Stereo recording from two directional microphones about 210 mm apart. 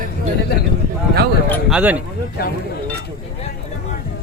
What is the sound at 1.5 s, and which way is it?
Speech, 5° right (ahead or behind).